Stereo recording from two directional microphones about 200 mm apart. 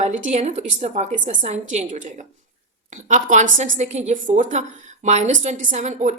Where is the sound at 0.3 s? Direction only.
35° right (ahead or behind).